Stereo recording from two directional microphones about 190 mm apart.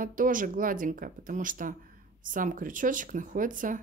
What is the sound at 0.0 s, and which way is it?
Speech, 45° right (ahead or behind).